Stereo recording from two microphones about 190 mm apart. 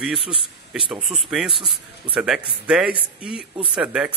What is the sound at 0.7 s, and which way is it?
A man's voice, centre (ahead or behind).